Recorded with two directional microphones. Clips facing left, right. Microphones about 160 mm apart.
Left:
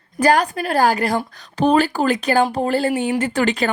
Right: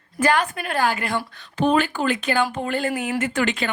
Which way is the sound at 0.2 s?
35° left (ahead or behind).